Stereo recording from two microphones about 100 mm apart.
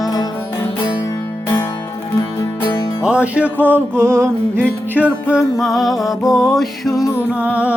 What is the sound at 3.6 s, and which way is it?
Music, 25° right (ahead or behind).